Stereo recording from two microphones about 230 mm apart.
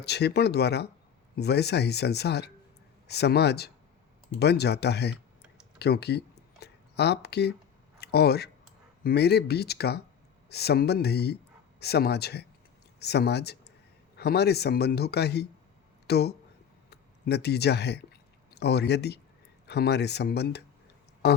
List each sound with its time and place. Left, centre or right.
0.0 s a man's voice: left
5.8 s a sound: left
7.9 s a man's voice: left